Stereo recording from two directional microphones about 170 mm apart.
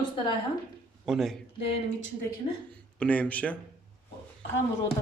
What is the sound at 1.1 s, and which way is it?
Speech, centre (ahead or behind).